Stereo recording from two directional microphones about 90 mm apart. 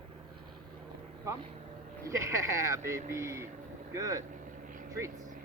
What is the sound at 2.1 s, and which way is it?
Speech, 35° right (ahead or behind).